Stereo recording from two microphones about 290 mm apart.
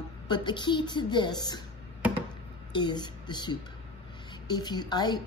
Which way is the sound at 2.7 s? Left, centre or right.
Centre.